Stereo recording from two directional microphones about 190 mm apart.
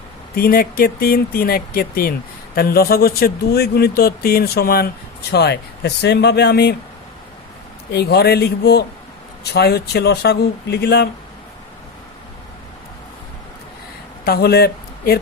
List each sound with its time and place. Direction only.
0.3 s speech: 50° left (ahead or behind)
7.9 s speech: 60° left (ahead or behind)
14.3 s speech: 55° left (ahead or behind)